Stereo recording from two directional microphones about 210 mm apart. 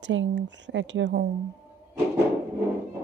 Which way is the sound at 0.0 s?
60° right (ahead or behind).